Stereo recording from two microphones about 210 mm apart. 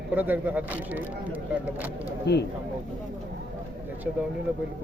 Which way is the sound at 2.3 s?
50° left (ahead or behind).